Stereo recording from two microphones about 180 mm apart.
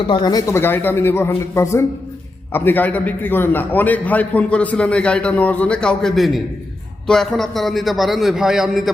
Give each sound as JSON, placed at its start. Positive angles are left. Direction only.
{"t": 0.1, "sound": "a man's voice", "side_deg": 25}